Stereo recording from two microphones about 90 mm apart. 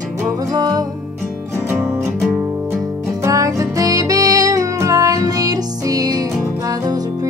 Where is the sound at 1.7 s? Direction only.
30° right (ahead or behind).